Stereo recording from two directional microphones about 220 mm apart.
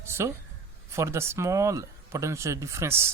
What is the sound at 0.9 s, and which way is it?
Speech, 15° right (ahead or behind).